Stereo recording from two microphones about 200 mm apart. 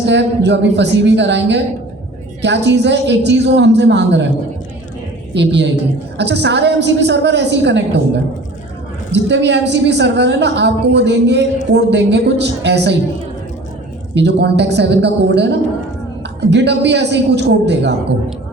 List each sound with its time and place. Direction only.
0.0 s a woman's voice: 60° right (ahead or behind)
5.3 s a woman's voice: 60° right (ahead or behind)
9.1 s a woman's voice: 60° right (ahead or behind)
14.2 s a woman's voice: 55° right (ahead or behind)
16.4 s a woman's voice: 60° right (ahead or behind)